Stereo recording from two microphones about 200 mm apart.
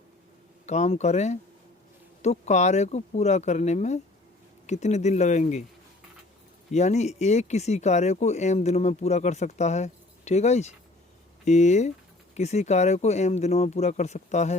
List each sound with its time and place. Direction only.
0.6 s speech: 35° left (ahead or behind)
6.7 s speech: 35° left (ahead or behind)